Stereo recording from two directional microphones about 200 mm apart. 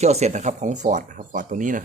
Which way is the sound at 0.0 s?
35° right (ahead or behind).